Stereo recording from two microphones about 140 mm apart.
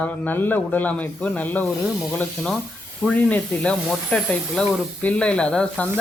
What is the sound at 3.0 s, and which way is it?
Speech, 10° left (ahead or behind).